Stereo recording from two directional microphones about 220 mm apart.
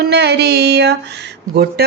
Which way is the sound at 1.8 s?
45° right (ahead or behind).